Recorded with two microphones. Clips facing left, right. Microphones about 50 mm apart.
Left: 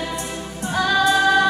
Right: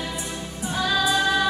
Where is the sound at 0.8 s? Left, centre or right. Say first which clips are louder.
Left 5 dB; centre.